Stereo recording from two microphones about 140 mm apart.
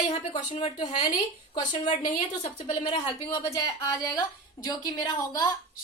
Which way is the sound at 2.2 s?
50° left (ahead or behind).